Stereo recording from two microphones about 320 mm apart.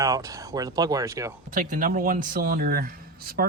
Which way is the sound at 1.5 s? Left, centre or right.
Right.